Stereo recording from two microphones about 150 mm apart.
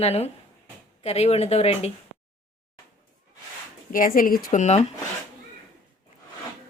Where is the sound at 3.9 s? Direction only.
65° left (ahead or behind); by 4.8 s 50° left (ahead or behind).